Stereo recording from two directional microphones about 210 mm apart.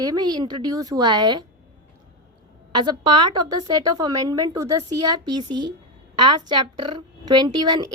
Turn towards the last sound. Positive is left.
turn(degrees=-20)  # may be behind; listen again after turning